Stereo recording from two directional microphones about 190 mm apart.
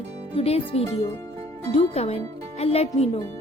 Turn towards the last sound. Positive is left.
turn(degrees=30)  # may be behind; listen again after turning